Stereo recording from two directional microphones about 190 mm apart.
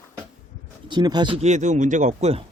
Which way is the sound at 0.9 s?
25° right (ahead or behind).